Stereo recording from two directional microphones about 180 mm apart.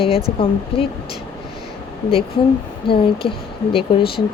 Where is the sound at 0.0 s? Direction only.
35° left (ahead or behind).